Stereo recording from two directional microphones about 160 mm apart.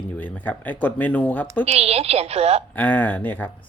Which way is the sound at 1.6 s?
40° right (ahead or behind).